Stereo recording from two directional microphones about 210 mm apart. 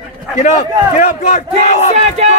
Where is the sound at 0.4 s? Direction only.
35° left (ahead or behind).